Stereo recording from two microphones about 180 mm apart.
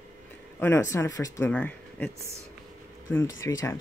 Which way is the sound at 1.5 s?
5° left (ahead or behind).